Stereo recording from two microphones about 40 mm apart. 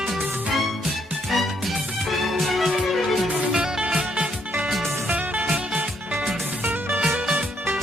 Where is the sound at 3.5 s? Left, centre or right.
Centre.